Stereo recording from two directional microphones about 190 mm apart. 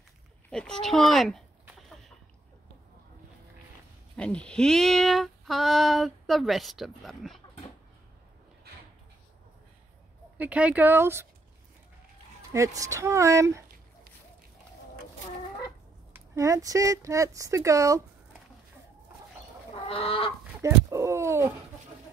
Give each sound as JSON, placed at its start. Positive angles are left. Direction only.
{"t": 0.5, "sound": "a sound", "side_deg": 5}
{"t": 4.2, "sound": "speech", "side_deg": 5}
{"t": 10.3, "sound": "speech", "side_deg": -10}
{"t": 12.5, "sound": "speech", "side_deg": -15}
{"t": 16.1, "sound": "speech", "side_deg": -15}
{"t": 19.7, "sound": "chicken", "side_deg": 30}
{"t": 20.6, "sound": "speech", "side_deg": -15}